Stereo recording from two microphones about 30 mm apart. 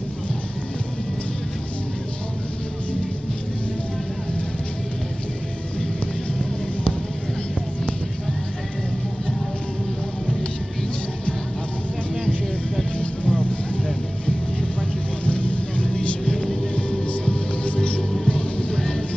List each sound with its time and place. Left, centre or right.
12.9 s music: left
15.2 s vehicle: left
15.9 s music: left
17.2 s music: left
18.8 s train: left